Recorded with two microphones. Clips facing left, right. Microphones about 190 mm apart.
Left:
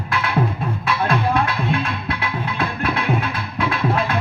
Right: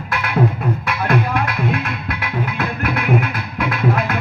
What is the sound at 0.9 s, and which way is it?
Music, 30° left (ahead or behind).